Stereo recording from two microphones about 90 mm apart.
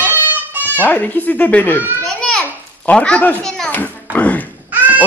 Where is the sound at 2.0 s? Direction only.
10° left (ahead or behind).